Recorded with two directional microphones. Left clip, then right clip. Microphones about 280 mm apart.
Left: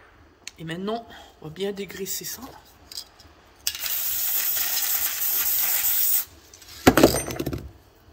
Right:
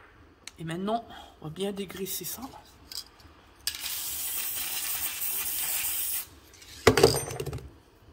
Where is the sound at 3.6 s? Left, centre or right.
Centre.